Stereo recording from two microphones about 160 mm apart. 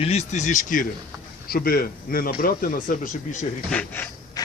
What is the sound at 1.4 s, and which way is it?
Speech, 70° left (ahead or behind).